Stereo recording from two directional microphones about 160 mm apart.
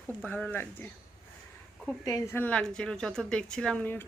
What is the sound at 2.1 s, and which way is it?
Speech, 20° left (ahead or behind).